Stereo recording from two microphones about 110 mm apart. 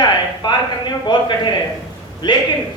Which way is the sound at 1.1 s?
45° left (ahead or behind).